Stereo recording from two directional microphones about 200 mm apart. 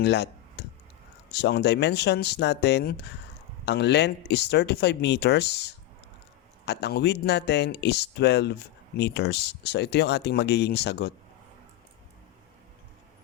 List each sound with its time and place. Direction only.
0.0 s clicking: 60° left (ahead or behind)
1.3 s speech: 55° left (ahead or behind)